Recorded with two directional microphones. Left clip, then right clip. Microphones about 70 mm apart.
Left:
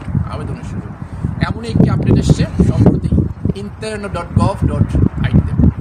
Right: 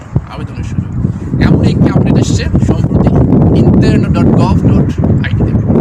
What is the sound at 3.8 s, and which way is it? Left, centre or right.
Speech, left.